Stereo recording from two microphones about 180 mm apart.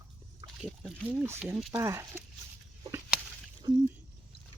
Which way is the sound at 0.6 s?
Centre (ahead or behind).